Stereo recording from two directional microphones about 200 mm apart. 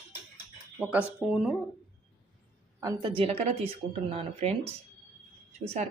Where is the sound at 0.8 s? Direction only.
5° right (ahead or behind).